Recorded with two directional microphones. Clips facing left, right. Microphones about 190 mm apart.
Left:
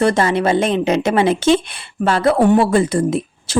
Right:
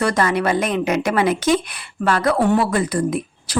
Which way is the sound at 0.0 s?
25° left (ahead or behind).